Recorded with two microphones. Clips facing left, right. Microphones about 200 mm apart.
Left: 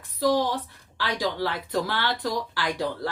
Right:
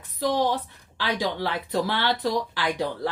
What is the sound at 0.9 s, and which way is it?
Speech, 20° right (ahead or behind).